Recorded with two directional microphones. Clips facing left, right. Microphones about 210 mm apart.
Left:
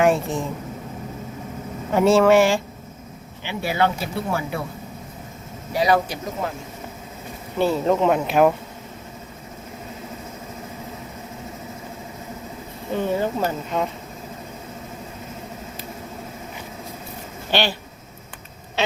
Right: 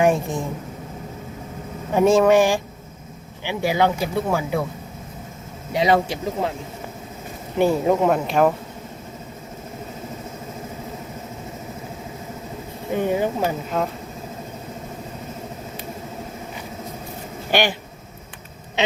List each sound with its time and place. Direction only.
0.0 s speech: 15° right (ahead or behind)
1.9 s speech: 15° right (ahead or behind)
5.7 s speech: 25° right (ahead or behind)
7.6 s speech: 10° right (ahead or behind)
8.1 s speech: centre (ahead or behind)
12.9 s speech: 15° right (ahead or behind)
17.5 s speech: 15° right (ahead or behind)